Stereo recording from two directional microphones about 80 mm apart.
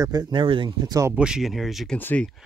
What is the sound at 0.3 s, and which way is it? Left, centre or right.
Speech, right.